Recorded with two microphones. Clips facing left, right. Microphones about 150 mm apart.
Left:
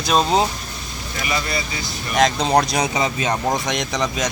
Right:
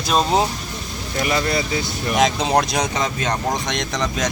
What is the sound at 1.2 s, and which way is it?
Speech, 55° right (ahead or behind).